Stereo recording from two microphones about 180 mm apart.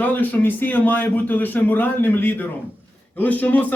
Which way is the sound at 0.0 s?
10° left (ahead or behind).